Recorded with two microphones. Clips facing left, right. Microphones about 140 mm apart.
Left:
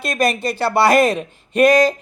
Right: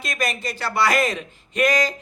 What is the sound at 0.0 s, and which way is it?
Speech, 60° left (ahead or behind).